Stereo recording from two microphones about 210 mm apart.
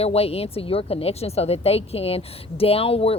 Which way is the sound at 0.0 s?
30° left (ahead or behind).